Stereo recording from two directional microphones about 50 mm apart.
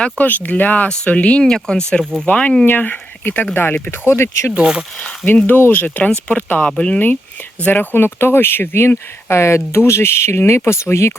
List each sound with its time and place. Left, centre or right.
0.2 s speech: left
0.9 s speech: left
1.5 s speech: centre
2.2 s speech: left
4.5 s speech: centre
4.9 s speech: left
5.5 s speech: left
5.8 s speech: left
7.7 s speech: left
9.3 s speech: left